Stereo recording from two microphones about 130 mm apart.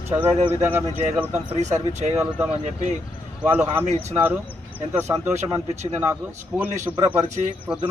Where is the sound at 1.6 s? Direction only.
65° right (ahead or behind).